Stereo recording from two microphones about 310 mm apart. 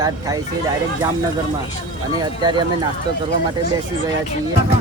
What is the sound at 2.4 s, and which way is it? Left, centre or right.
Speech, centre.